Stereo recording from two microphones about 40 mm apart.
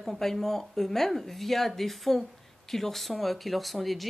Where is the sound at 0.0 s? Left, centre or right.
Centre.